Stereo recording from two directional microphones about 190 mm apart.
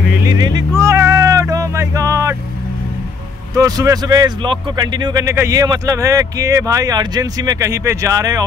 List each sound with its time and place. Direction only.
0.3 s music: 20° right (ahead or behind)
3.5 s speech: 15° right (ahead or behind)